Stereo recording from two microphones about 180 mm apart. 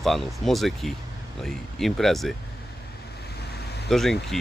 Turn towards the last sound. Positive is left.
turn(degrees=0)  # may be behind; listen again after turning